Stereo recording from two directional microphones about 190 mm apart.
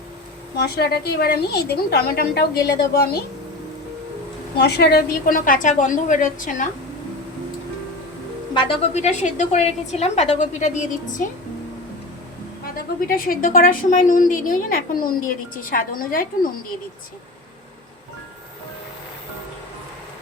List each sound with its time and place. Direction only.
0.6 s a woman's voice: 55° left (ahead or behind)
4.5 s a woman's voice: 60° left (ahead or behind); by 6.7 s 45° left (ahead or behind)
8.5 s a woman's voice: 30° left (ahead or behind)
12.7 s a woman's voice: 50° left (ahead or behind)